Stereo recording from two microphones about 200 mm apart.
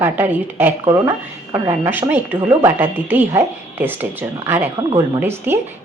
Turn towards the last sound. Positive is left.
turn(degrees=-10)  # may be behind; listen again after turning